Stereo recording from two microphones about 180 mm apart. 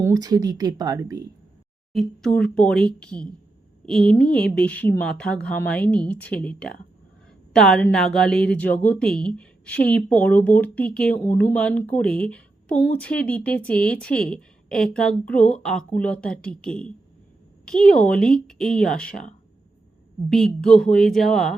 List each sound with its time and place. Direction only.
0.0 s speech: 20° right (ahead or behind)
1.9 s a woman's voice: centre (ahead or behind)
20.3 s a woman's voice: centre (ahead or behind)